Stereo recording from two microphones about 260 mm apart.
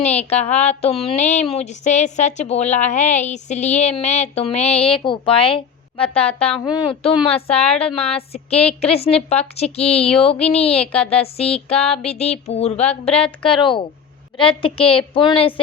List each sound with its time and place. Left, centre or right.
0.0 s speech: left
7.6 s a woman's voice: centre
7.9 s speech: left